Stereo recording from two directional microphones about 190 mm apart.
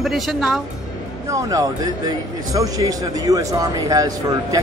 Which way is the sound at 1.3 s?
20° right (ahead or behind).